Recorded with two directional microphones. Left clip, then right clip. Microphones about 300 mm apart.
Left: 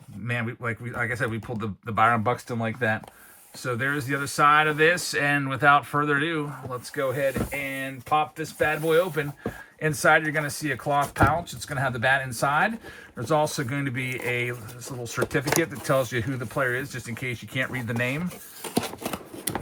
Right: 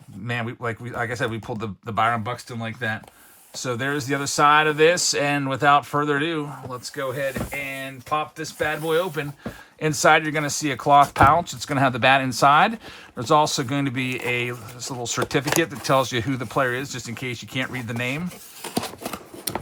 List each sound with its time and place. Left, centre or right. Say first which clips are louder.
0.3 s speech: right 2 dB; centre